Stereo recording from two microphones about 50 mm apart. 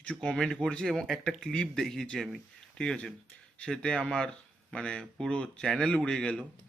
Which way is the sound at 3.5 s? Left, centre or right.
Centre.